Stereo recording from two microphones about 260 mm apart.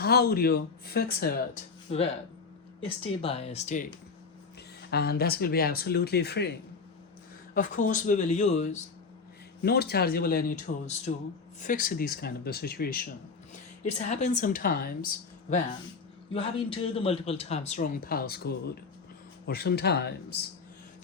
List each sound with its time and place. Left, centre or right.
0.0 s speech: left
2.8 s a man's voice: left
4.9 s a man's voice: left
9.6 s a woman's voice: left
16.3 s a man's voice: left